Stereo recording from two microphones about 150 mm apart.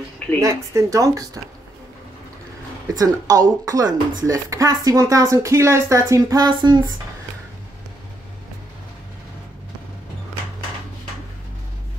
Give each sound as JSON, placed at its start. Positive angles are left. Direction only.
{"t": 0.4, "sound": "speech", "side_deg": -20}
{"t": 3.0, "sound": "speech", "side_deg": -25}